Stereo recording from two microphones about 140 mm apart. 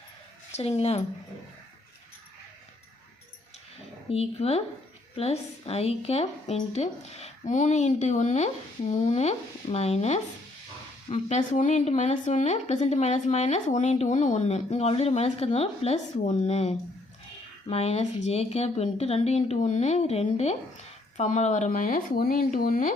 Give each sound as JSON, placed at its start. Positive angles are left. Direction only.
{"t": 0.5, "sound": "speech", "side_deg": 50}
{"t": 4.1, "sound": "speech", "side_deg": 45}
{"t": 16.2, "sound": "speech", "side_deg": 55}